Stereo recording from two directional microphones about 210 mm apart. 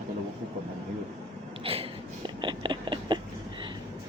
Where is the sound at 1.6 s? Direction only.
25° right (ahead or behind).